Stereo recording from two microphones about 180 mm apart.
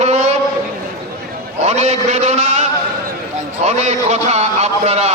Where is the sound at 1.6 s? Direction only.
40° right (ahead or behind).